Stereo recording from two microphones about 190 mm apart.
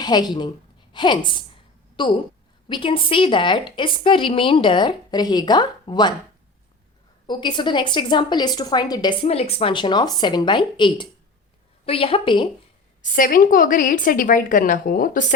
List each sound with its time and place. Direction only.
0.0 s a woman's voice: 20° left (ahead or behind)
7.3 s a woman's voice: 25° left (ahead or behind)
13.0 s a woman's voice: 45° left (ahead or behind)